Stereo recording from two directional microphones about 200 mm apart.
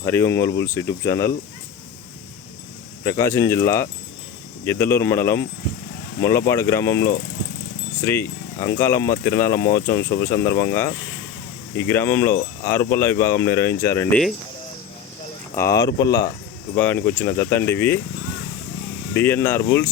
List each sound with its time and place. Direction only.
0.0 s speech: 10° left (ahead or behind)
3.0 s speech: 15° left (ahead or behind)
6.5 s speech: 10° left (ahead or behind)
8.0 s speech: 10° left (ahead or behind)
15.5 s speech: 15° left (ahead or behind)
19.1 s speech: 10° left (ahead or behind)